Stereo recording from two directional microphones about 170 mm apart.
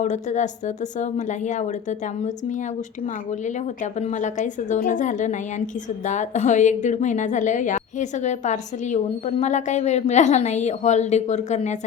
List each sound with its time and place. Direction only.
0.0 s a woman's voice: 45° left (ahead or behind)
4.0 s a woman's voice: 45° left (ahead or behind)